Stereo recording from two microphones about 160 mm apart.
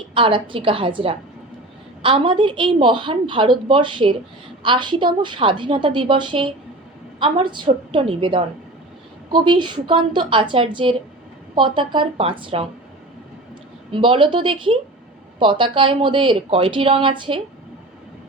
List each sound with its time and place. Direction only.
0.1 s a woman's voice: 30° right (ahead or behind)
13.9 s a woman's voice: 30° right (ahead or behind)